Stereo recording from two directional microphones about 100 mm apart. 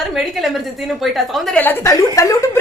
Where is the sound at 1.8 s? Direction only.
30° left (ahead or behind).